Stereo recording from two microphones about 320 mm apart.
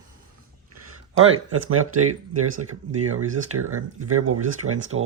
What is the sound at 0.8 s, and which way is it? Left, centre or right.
Speech, right.